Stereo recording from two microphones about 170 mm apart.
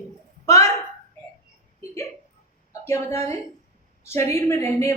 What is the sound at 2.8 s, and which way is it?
Speech, 15° left (ahead or behind).